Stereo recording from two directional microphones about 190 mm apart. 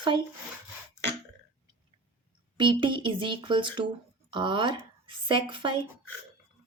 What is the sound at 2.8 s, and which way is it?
Speech, 25° right (ahead or behind).